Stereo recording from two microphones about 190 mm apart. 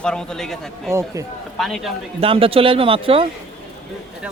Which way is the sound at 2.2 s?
30° right (ahead or behind).